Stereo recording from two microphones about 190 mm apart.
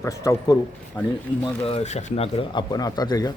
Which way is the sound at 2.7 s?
20° left (ahead or behind).